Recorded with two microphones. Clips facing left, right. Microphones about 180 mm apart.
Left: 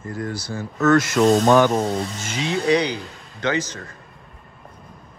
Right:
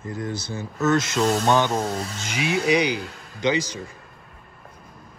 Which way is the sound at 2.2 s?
15° right (ahead or behind).